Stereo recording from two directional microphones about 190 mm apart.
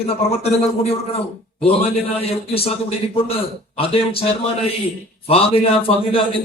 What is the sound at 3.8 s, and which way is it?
A man's voice, 30° left (ahead or behind).